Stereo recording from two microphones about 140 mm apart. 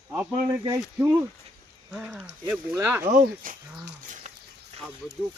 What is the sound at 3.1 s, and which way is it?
Speech, 90° right.